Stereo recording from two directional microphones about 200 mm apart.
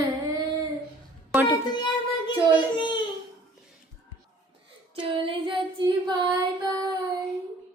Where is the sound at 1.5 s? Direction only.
20° left (ahead or behind).